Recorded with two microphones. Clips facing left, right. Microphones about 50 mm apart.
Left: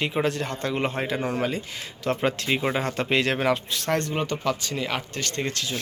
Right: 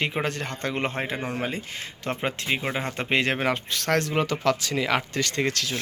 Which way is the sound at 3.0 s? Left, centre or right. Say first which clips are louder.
Right 2 dB; right.